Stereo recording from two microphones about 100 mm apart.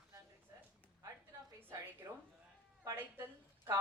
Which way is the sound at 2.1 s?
35° right (ahead or behind).